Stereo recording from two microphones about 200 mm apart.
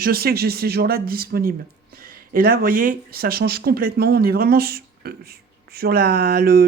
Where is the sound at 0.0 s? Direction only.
50° right (ahead or behind).